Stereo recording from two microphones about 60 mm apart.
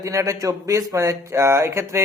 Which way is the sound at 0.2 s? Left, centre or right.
Right.